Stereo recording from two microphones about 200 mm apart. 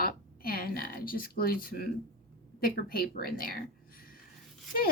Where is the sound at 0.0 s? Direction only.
45° left (ahead or behind).